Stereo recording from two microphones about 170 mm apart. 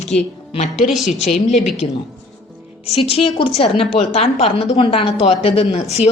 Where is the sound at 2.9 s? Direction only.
35° left (ahead or behind).